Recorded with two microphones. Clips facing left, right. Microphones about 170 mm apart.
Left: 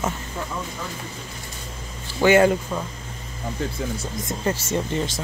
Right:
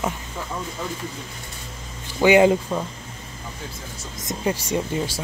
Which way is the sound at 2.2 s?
15° right (ahead or behind).